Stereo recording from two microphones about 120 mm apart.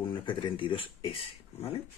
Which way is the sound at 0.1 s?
45° left (ahead or behind).